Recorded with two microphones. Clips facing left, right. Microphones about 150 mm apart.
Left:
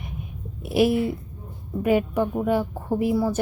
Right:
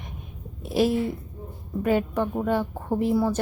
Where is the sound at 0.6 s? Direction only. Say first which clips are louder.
Left 2 dB; 10° left (ahead or behind).